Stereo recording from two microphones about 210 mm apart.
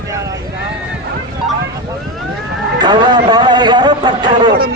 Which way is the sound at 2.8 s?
20° right (ahead or behind).